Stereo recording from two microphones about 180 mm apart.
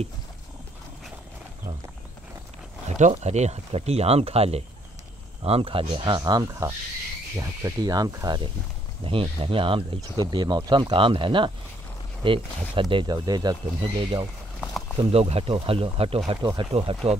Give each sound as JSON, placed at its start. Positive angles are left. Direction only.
{"t": 2.9, "sound": "speech", "side_deg": -40}
{"t": 9.0, "sound": "speech", "side_deg": -30}